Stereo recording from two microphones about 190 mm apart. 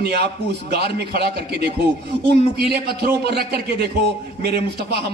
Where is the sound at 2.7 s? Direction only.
55° right (ahead or behind).